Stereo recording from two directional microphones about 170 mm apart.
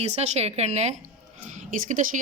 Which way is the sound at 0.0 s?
40° right (ahead or behind).